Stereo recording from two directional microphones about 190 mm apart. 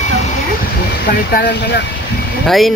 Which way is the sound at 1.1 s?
55° left (ahead or behind).